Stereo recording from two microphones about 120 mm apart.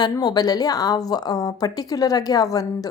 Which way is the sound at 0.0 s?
35° left (ahead or behind).